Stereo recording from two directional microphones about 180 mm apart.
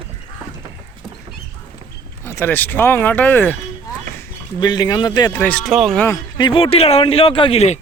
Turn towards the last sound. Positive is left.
turn(degrees=35)  # may be behind; listen again after turning